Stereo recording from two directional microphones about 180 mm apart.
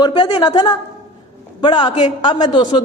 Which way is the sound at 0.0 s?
25° left (ahead or behind).